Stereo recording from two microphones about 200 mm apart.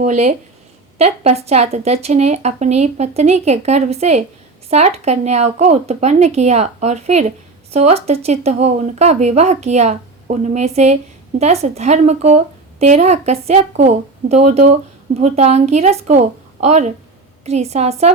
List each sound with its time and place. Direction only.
0.0 s a woman's voice: 35° right (ahead or behind)